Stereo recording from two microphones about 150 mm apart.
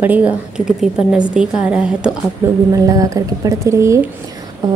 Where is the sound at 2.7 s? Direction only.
20° right (ahead or behind).